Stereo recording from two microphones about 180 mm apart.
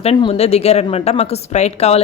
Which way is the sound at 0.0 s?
35° left (ahead or behind).